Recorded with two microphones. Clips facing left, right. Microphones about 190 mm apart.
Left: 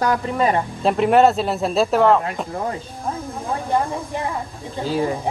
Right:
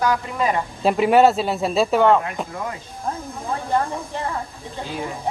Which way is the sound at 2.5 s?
35° left (ahead or behind).